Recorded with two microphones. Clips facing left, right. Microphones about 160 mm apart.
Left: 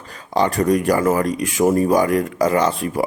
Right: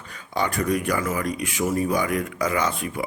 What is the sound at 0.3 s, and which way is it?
Speech, 35° left (ahead or behind).